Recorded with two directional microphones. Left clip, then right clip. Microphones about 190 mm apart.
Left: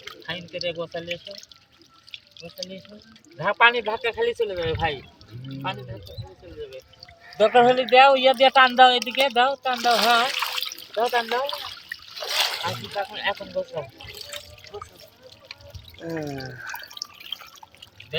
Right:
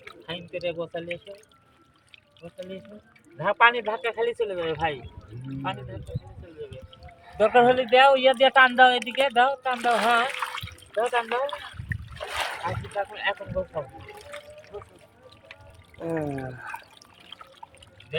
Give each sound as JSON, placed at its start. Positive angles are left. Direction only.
{"t": 0.2, "sound": "speech", "side_deg": -5}
{"t": 3.3, "sound": "speech", "side_deg": 25}
{"t": 7.3, "sound": "speech", "side_deg": 40}
{"t": 12.6, "sound": "speech", "side_deg": 25}
{"t": 16.0, "sound": "drip", "side_deg": -10}
{"t": 16.3, "sound": "speech", "side_deg": 0}
{"t": 17.0, "sound": "drip", "side_deg": 50}